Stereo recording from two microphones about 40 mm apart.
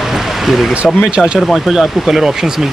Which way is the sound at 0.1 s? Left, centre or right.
Centre.